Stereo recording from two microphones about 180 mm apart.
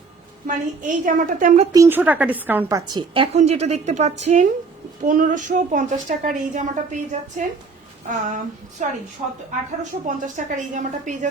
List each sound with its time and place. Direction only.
0.4 s a woman's voice: 45° right (ahead or behind)
1.7 s a woman's voice: 15° right (ahead or behind)
3.3 s a woman's voice: 35° right (ahead or behind)
10.2 s a woman's voice: 45° right (ahead or behind)